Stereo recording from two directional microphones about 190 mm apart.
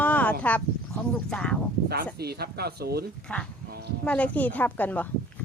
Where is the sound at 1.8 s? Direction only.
55° right (ahead or behind).